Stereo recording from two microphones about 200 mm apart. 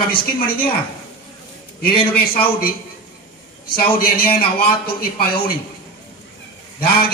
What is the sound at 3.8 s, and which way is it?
Speech, 50° left (ahead or behind).